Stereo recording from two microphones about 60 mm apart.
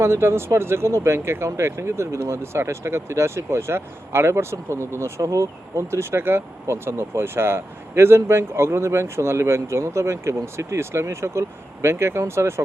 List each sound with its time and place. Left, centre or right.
0.0 s speech: right